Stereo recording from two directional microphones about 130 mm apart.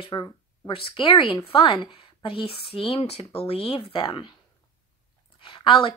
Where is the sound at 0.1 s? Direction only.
35° left (ahead or behind).